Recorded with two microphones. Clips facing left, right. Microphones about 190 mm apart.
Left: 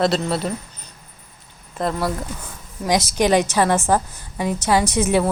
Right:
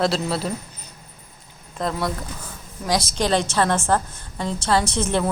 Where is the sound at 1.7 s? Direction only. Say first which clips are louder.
Left 2 dB; 5° left (ahead or behind).